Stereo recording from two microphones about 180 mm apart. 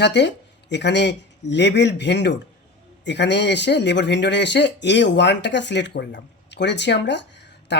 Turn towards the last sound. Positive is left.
turn(degrees=75)  # may be behind; listen again after turning